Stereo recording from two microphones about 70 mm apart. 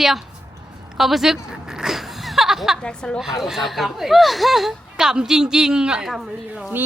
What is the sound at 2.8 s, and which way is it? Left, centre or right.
Speech, centre.